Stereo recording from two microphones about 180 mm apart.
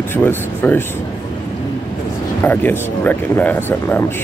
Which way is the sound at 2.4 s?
10° left (ahead or behind).